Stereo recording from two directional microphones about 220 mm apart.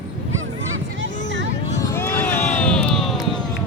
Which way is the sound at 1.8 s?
15° left (ahead or behind).